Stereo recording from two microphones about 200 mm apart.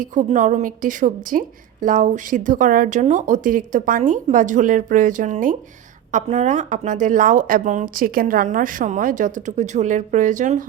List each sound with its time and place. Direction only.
0.0 s a woman's voice: 40° right (ahead or behind)